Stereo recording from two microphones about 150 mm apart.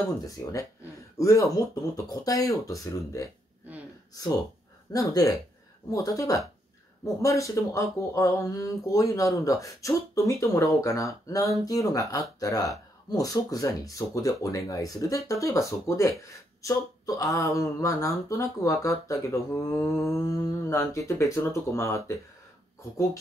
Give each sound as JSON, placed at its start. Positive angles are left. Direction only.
{"t": 0.0, "sound": "speech", "side_deg": 20}